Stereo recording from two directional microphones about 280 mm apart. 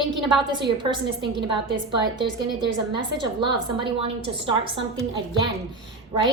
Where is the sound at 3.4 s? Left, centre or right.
Centre.